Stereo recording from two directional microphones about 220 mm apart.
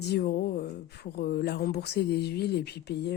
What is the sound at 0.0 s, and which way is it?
Speech, 45° left (ahead or behind).